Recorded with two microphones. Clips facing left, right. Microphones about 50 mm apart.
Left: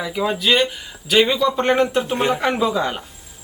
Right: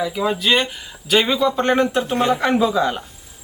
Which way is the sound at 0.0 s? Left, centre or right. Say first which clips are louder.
Right 1 dB; centre.